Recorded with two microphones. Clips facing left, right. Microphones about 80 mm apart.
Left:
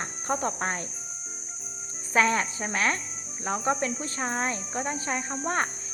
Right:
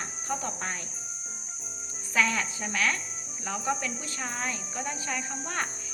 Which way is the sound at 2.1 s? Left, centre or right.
Left.